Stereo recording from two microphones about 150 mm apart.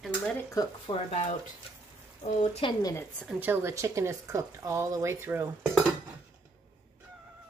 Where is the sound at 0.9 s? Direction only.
30° left (ahead or behind).